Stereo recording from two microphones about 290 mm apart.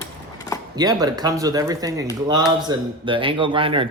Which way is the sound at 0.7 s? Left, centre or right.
Centre.